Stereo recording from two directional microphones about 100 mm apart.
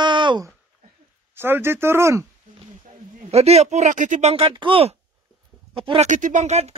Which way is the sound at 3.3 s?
90° right.